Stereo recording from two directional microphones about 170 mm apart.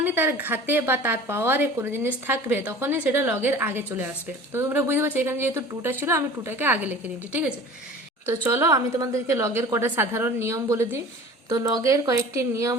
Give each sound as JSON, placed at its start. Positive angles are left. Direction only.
{"t": 0.0, "sound": "a woman's voice", "side_deg": -10}